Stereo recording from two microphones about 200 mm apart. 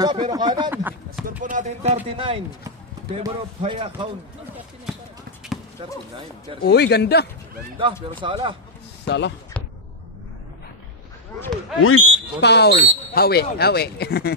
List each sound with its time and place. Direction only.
0.0 s a man's voice: 20° right (ahead or behind)
0.7 s speech: 10° right (ahead or behind)
1.4 s a man's voice: 40° right (ahead or behind)
6.6 s speech: 55° left (ahead or behind)
8.2 s a man's voice: 25° right (ahead or behind)
9.0 s speech: 60° left (ahead or behind)
11.4 s speech: centre (ahead or behind)
12.4 s speech: 55° left (ahead or behind)